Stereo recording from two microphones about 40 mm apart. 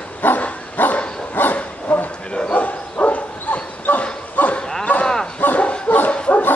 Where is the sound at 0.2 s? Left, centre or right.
Left.